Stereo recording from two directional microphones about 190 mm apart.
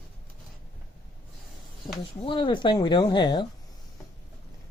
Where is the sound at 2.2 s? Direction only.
25° left (ahead or behind).